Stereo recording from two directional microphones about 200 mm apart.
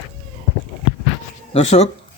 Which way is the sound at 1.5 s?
30° left (ahead or behind).